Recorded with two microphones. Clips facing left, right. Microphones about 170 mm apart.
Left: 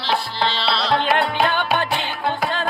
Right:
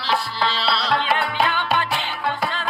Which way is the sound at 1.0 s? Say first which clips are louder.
Left 3 dB; 60° left (ahead or behind).